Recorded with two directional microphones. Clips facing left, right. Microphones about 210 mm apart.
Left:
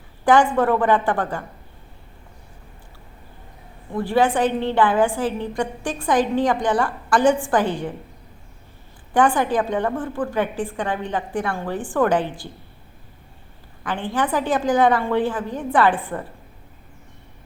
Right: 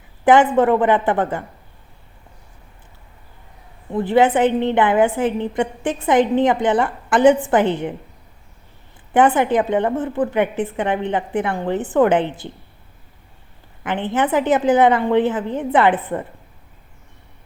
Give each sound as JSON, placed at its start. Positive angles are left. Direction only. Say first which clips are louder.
{"t": 0.3, "sound": "a woman's voice", "louder": "right 3 dB", "side_deg": -20}
{"t": 3.9, "sound": "a woman's voice", "louder": "right 4 dB", "side_deg": -20}
{"t": 9.1, "sound": "a woman's voice", "louder": "right 3 dB", "side_deg": -20}
{"t": 13.8, "sound": "a woman's voice", "louder": "right 3 dB", "side_deg": -20}